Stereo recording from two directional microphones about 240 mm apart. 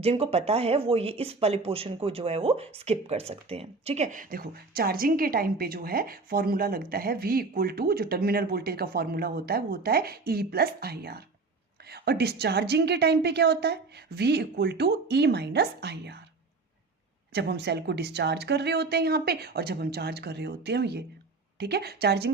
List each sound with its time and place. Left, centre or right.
0.0 s a woman's voice: right
17.3 s a woman's voice: right